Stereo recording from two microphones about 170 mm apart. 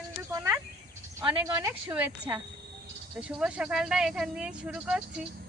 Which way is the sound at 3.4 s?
5° right (ahead or behind).